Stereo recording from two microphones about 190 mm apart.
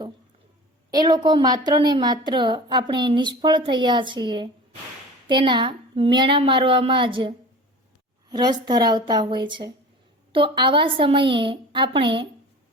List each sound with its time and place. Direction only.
0.9 s a woman's voice: 20° right (ahead or behind)